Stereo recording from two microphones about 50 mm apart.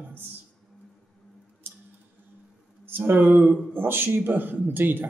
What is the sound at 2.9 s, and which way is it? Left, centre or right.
A man's voice, right.